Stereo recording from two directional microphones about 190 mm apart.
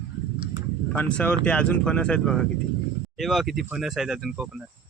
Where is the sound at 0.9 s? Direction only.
10° left (ahead or behind).